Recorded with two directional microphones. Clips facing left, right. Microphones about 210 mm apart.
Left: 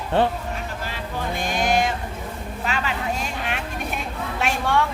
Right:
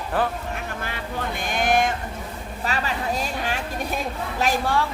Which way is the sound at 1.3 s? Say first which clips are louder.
Even; 55° right (ahead or behind).